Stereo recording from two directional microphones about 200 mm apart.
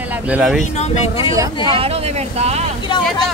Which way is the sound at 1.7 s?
30° right (ahead or behind).